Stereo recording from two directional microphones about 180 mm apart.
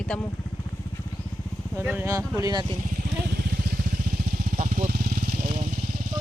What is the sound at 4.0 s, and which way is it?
Vehicle, 50° right (ahead or behind).